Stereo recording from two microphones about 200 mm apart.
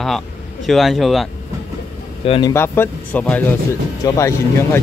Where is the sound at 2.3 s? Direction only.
25° left (ahead or behind).